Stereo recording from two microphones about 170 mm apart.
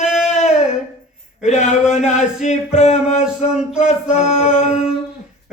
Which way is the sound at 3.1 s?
5° right (ahead or behind).